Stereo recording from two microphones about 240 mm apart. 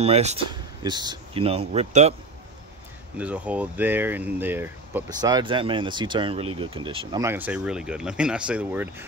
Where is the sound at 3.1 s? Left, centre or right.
Centre; by 7.2 s right.